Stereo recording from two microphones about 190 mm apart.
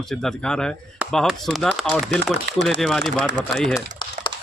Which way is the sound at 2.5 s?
65° right (ahead or behind).